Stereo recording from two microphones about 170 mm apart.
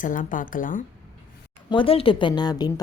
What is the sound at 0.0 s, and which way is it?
Speech, 50° left (ahead or behind).